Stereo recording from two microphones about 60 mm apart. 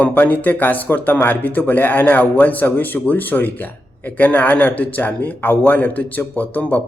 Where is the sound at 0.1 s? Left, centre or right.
Left.